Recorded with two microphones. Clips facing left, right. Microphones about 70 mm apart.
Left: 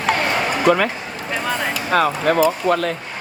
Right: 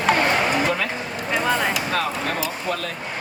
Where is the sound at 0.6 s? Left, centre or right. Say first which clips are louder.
Left 8 dB; left.